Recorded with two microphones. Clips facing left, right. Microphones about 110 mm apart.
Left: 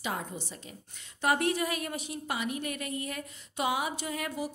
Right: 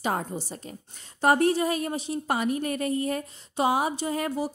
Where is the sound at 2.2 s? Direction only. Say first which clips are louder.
Right 7 dB; 40° right (ahead or behind).